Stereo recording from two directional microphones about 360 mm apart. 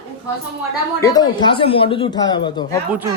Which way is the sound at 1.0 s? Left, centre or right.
Centre.